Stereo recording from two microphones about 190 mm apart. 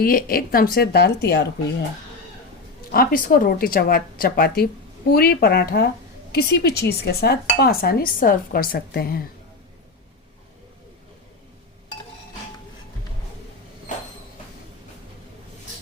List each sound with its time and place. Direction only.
0.0 s speech: 50° left (ahead or behind)
2.9 s speech: 50° left (ahead or behind)